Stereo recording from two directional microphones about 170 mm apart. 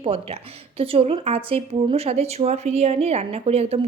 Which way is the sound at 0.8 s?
35° right (ahead or behind).